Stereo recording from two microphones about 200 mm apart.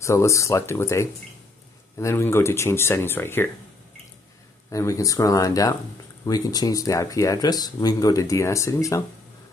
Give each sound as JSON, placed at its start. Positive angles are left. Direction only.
{"t": 0.0, "sound": "speech", "side_deg": 15}
{"t": 4.6, "sound": "speech", "side_deg": 15}